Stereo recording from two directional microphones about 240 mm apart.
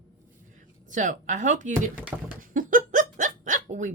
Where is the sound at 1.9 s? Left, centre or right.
Centre.